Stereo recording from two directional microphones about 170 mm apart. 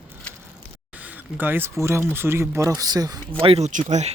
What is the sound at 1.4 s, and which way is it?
Speech, 10° right (ahead or behind).